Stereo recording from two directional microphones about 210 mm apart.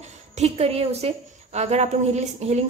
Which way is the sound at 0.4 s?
30° right (ahead or behind).